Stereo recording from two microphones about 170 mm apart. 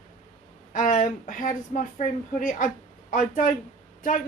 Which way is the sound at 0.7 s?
50° left (ahead or behind).